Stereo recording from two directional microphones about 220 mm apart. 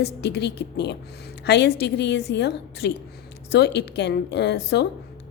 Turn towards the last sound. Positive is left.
turn(degrees=50)  # may be behind; listen again after turning